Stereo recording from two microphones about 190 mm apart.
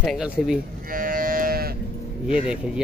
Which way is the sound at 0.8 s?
50° right (ahead or behind).